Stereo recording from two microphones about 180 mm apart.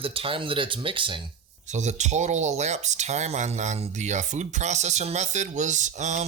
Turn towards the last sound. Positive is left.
turn(degrees=-40)  # may be behind; listen again after turning